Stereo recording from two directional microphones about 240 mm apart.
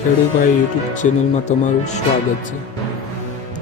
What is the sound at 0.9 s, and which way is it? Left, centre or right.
Speech, left.